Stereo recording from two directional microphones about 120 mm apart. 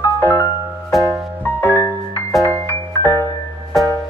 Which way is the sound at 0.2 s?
15° left (ahead or behind).